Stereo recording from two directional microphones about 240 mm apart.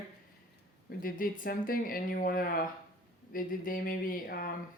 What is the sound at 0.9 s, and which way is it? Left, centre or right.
Speech, left.